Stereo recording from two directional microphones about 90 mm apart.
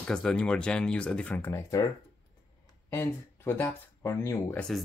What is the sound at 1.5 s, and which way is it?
Speech, 35° left (ahead or behind).